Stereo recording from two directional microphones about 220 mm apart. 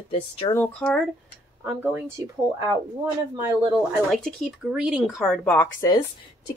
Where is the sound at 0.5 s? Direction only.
5° left (ahead or behind).